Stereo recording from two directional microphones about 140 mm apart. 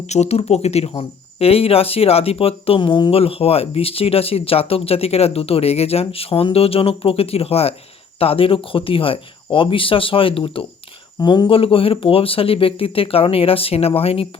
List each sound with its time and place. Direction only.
0.1 s speech: 50° left (ahead or behind)